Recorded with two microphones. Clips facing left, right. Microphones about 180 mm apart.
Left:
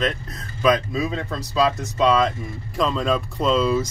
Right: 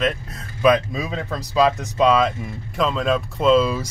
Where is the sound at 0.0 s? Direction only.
5° right (ahead or behind).